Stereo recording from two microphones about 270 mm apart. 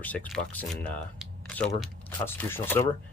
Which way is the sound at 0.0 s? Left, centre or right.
Centre.